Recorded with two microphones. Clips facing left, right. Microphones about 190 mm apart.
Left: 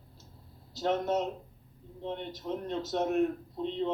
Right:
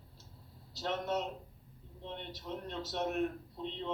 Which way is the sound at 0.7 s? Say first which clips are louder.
Left 6 dB; 45° left (ahead or behind).